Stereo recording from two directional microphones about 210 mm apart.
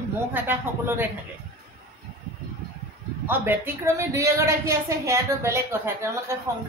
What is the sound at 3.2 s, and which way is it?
A woman's voice, 10° right (ahead or behind).